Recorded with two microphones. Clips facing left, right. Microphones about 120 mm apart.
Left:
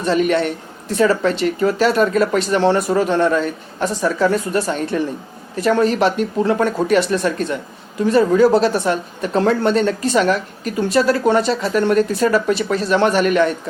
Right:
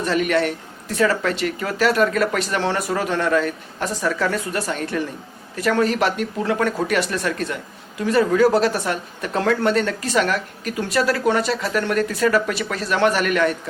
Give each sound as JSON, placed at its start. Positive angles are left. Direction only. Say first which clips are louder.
{"t": 0.0, "sound": "speech", "louder": "left 3 dB", "side_deg": 25}